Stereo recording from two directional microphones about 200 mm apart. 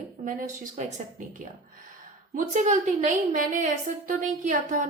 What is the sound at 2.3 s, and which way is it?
A woman's voice, 35° right (ahead or behind).